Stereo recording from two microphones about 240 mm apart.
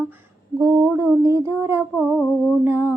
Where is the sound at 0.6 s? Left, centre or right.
Centre.